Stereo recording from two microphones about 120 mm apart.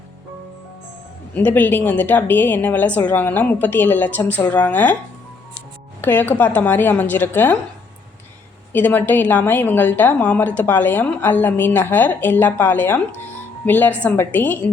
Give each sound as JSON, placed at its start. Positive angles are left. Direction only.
{"t": 1.3, "sound": "a woman's voice", "side_deg": 15}
{"t": 6.0, "sound": "a woman's voice", "side_deg": 15}
{"t": 8.7, "sound": "a woman's voice", "side_deg": 15}